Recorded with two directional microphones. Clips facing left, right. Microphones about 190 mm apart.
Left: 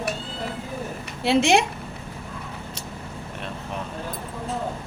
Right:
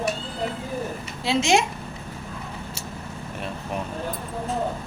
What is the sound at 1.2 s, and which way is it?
Speech, 60° left (ahead or behind).